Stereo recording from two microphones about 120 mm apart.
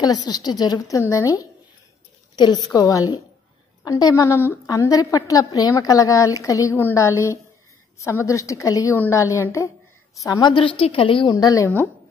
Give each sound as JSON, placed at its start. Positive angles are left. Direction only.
{"t": 0.0, "sound": "a woman's voice", "side_deg": 35}
{"t": 10.5, "sound": "a woman's voice", "side_deg": 45}
{"t": 11.3, "sound": "a woman's voice", "side_deg": 30}